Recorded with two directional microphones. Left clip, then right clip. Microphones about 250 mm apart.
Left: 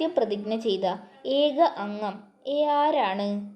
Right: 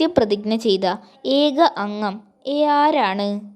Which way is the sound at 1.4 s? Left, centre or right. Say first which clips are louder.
Right 4 dB; right.